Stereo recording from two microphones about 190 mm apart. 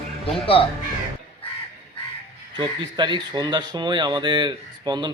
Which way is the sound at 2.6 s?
25° right (ahead or behind).